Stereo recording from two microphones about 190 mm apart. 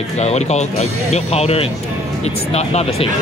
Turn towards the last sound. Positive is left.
turn(degrees=35)  # may be behind; listen again after turning